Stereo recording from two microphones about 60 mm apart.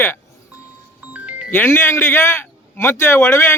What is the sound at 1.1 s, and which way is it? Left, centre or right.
Music, right.